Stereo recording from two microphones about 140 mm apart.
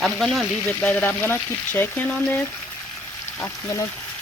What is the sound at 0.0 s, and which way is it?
Frying, centre (ahead or behind).